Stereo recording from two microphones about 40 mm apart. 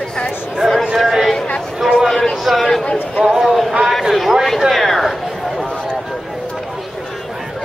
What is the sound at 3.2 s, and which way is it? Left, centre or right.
Speech, centre.